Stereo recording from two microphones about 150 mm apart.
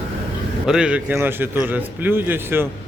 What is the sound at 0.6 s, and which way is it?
Speech, 5° right (ahead or behind).